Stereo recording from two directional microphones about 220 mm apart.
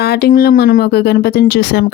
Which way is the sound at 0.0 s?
45° left (ahead or behind).